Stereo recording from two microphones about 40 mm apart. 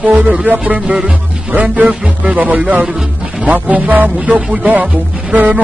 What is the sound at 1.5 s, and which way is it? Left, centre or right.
Speech, right.